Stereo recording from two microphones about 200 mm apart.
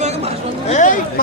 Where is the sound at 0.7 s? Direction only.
40° left (ahead or behind).